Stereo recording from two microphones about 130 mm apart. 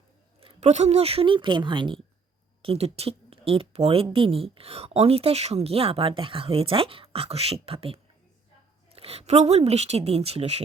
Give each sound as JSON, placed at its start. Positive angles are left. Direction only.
{"t": 0.3, "sound": "a woman's voice", "side_deg": -55}
{"t": 2.6, "sound": "a woman's voice", "side_deg": -50}